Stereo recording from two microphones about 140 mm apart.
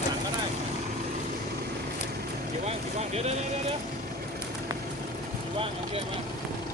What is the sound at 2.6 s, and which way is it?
Vehicle, 50° right (ahead or behind).